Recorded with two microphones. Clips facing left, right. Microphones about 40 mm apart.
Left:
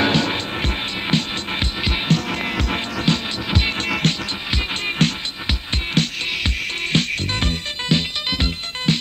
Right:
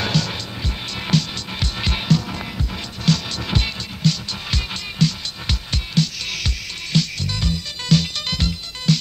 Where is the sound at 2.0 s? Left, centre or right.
Left.